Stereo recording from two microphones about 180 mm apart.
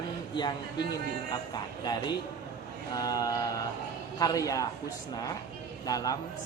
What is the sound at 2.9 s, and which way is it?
A man's voice, 20° left (ahead or behind).